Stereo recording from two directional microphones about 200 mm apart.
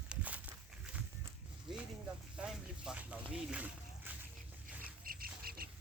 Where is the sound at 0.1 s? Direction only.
5° right (ahead or behind).